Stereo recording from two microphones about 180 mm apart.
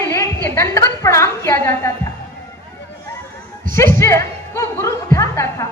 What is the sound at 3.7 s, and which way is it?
Speech, 15° left (ahead or behind).